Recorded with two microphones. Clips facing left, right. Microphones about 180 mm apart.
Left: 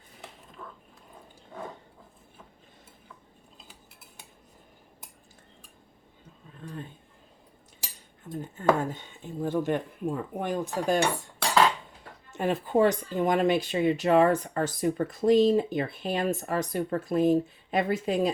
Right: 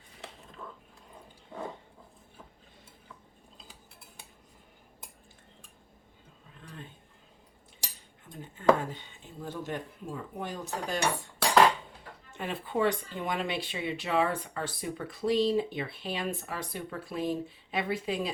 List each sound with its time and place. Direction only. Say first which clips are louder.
8.3 s speech: even; 45° left (ahead or behind)
12.3 s speech: left 8 dB; 45° left (ahead or behind)